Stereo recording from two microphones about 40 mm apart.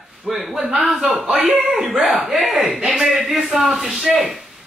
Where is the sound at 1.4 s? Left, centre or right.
Right.